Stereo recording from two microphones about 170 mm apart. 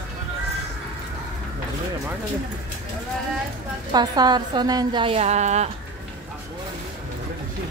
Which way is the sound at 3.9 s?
25° right (ahead or behind).